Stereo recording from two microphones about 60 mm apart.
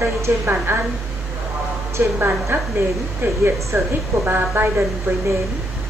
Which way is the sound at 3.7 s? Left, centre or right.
Right.